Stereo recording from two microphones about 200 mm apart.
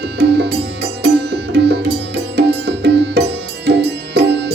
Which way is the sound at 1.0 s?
55° right (ahead or behind).